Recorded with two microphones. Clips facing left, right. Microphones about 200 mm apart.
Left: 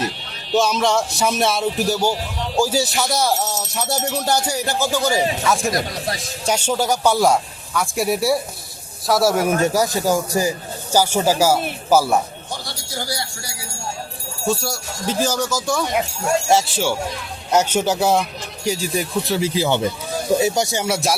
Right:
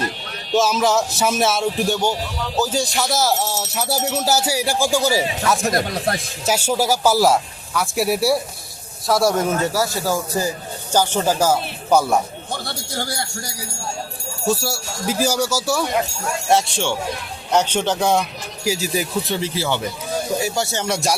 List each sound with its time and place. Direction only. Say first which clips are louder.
0.5 s speech: even; centre (ahead or behind)
12.6 s speech: right 1 dB; 50° right (ahead or behind)
14.4 s speech: right 1 dB; 5° right (ahead or behind)
16.5 s speech: right 3 dB; centre (ahead or behind)
19.4 s speech: left 4 dB; 15° left (ahead or behind); by 21.2 s centre (ahead or behind)